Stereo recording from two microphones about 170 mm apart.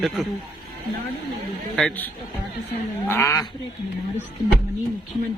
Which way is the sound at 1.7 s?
Centre (ahead or behind).